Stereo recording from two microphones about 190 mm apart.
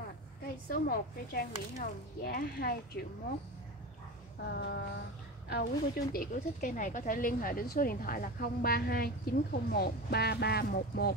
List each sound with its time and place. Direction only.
0.8 s speech: 50° left (ahead or behind)
4.5 s speech: 60° left (ahead or behind)
5.5 s a woman's voice: 50° left (ahead or behind)